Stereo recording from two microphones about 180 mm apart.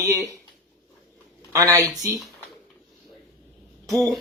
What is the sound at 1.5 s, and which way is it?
Speech, 20° right (ahead or behind).